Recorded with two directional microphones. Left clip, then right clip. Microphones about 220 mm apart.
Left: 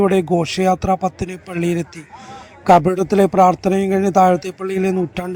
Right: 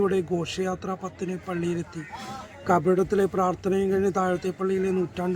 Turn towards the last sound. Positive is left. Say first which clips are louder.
# left 6 dB
turn(degrees=30)  # may be behind; listen again after turning